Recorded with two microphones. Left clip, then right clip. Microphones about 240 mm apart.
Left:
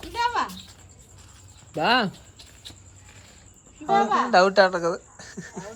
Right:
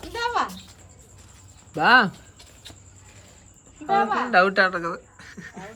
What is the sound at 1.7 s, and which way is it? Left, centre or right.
Speech, centre.